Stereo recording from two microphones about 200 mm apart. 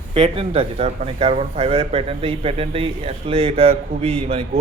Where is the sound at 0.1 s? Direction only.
30° right (ahead or behind).